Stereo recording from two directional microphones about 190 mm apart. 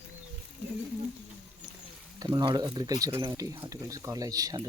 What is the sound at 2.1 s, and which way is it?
Speech, 20° right (ahead or behind).